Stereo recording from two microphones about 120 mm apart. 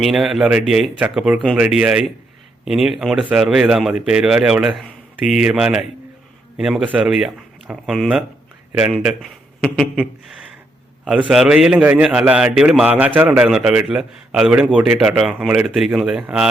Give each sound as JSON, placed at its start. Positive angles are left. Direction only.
{"t": 0.0, "sound": "a man's voice", "side_deg": 0}
{"t": 11.0, "sound": "a man's voice", "side_deg": -5}